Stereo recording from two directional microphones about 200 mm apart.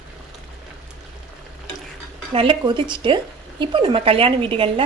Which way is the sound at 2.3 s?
25° right (ahead or behind).